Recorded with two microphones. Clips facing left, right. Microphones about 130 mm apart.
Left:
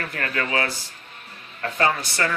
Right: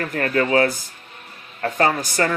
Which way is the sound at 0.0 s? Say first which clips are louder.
Right 7 dB; 40° right (ahead or behind).